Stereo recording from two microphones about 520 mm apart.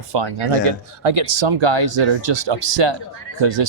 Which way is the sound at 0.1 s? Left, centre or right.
Right.